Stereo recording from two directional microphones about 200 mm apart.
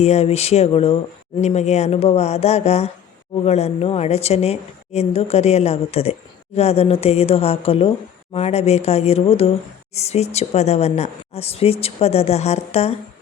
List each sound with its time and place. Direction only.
0.0 s speech: 30° left (ahead or behind)